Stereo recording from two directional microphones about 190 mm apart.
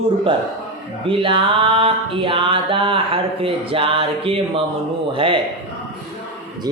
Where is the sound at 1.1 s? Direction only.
25° right (ahead or behind).